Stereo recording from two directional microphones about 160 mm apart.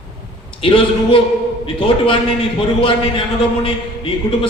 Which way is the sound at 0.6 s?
35° left (ahead or behind).